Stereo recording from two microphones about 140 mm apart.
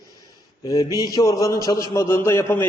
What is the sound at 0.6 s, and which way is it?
A man's voice, 30° left (ahead or behind).